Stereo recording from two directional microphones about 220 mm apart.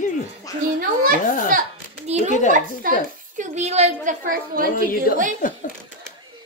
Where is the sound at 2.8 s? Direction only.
40° right (ahead or behind).